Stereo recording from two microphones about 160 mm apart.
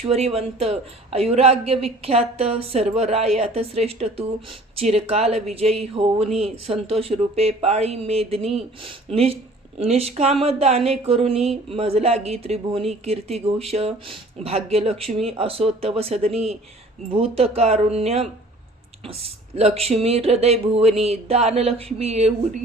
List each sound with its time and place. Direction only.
0.0 s speech: 40° right (ahead or behind)